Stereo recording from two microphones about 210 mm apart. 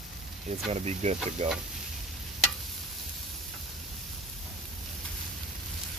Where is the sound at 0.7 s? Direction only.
30° right (ahead or behind).